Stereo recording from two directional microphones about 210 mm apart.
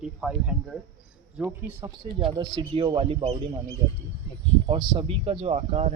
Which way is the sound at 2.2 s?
25° right (ahead or behind).